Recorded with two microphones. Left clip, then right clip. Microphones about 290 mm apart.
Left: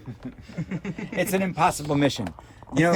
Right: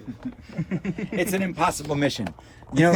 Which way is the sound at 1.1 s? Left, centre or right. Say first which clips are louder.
Left 1 dB; left.